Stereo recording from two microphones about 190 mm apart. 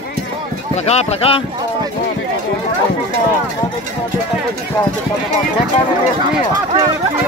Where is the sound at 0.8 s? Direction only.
30° left (ahead or behind).